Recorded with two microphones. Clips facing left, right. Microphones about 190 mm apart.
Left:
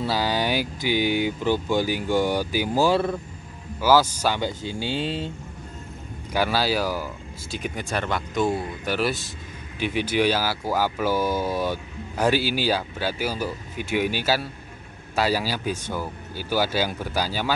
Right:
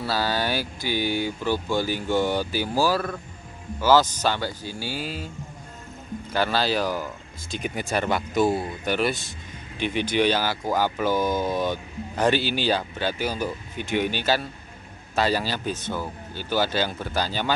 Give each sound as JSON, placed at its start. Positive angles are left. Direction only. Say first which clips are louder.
{"t": 0.0, "sound": "speech", "louder": "left 1 dB", "side_deg": 15}
{"t": 3.8, "sound": "speech", "louder": "even", "side_deg": 10}
{"t": 6.3, "sound": "speech", "louder": "left 1 dB", "side_deg": 10}